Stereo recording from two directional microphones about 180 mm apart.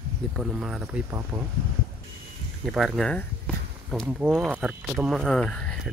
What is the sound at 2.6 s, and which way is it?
Speech, centre (ahead or behind).